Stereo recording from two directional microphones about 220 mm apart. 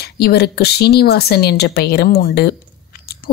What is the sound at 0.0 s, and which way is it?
Speech, 45° left (ahead or behind).